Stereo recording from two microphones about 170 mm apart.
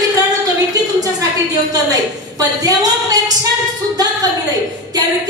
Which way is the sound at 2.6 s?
20° right (ahead or behind).